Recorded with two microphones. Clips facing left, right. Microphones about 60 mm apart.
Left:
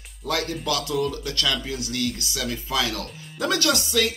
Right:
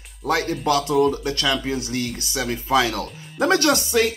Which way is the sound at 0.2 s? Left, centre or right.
Right.